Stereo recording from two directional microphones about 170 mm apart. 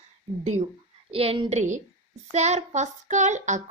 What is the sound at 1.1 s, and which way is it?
Speech, 35° right (ahead or behind).